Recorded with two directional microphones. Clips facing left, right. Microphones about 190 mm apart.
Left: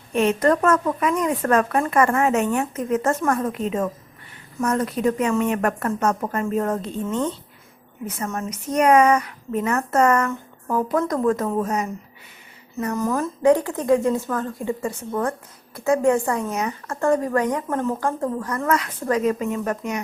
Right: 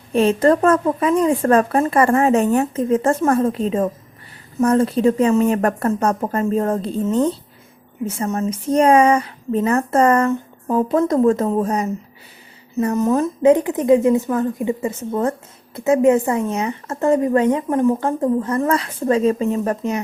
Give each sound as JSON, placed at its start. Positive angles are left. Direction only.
{"t": 0.1, "sound": "speech", "side_deg": -30}
{"t": 8.0, "sound": "speech", "side_deg": -25}
{"t": 12.8, "sound": "speech", "side_deg": -20}